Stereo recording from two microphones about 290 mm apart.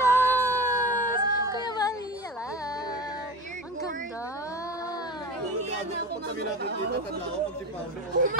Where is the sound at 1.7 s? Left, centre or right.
Centre.